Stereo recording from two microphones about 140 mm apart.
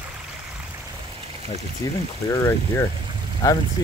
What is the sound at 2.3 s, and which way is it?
Speech, 20° left (ahead or behind).